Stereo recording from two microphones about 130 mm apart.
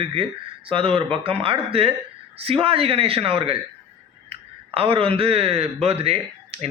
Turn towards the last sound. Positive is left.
turn(degrees=-50)  # may be behind; listen again after turning